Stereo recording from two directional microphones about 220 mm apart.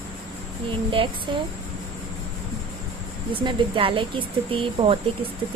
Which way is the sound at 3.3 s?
20° right (ahead or behind).